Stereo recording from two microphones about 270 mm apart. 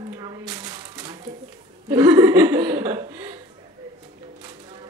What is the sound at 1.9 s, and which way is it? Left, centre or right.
Speech, centre.